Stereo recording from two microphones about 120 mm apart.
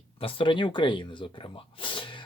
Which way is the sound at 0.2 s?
50° left (ahead or behind).